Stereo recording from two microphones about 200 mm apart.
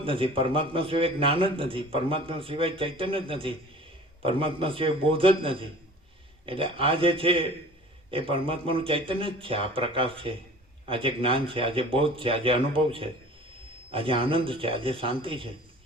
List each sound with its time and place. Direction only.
0.0 s speech: 25° right (ahead or behind)